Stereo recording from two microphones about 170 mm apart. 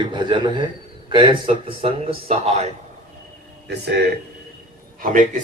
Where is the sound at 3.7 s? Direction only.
80° right.